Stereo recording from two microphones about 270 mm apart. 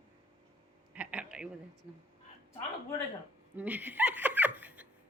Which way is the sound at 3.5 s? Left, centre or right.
Centre.